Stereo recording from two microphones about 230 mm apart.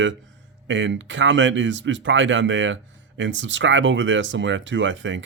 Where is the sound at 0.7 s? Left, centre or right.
Right.